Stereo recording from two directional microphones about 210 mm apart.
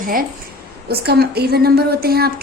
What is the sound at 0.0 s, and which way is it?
A woman's voice, 40° right (ahead or behind).